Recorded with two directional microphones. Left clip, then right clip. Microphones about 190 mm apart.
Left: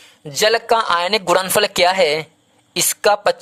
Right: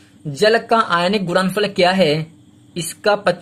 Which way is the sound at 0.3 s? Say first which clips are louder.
Right 1 dB; 45° left (ahead or behind).